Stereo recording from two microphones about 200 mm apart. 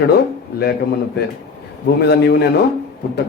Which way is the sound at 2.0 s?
55° left (ahead or behind).